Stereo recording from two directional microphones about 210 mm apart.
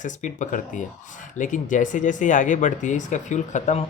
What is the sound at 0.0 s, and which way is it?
Speech, 35° left (ahead or behind).